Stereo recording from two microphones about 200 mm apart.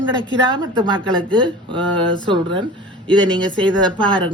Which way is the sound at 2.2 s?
25° right (ahead or behind).